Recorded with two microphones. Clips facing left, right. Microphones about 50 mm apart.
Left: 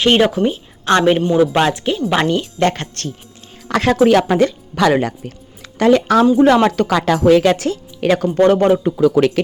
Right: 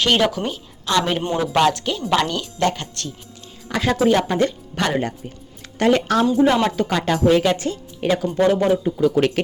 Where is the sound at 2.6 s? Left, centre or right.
Left.